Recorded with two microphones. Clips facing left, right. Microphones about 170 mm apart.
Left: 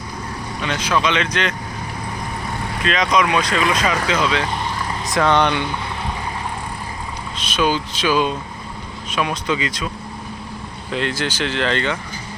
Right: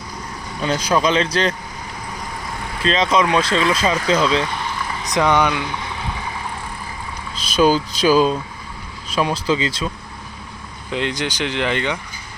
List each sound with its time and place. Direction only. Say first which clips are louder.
0.6 s speech: right 3 dB; 35° right (ahead or behind)
2.8 s speech: right 1 dB; 30° right (ahead or behind)
5.1 s speech: even; 15° right (ahead or behind)
7.4 s speech: right 4 dB; 35° right (ahead or behind)
10.9 s speech: even; 20° right (ahead or behind)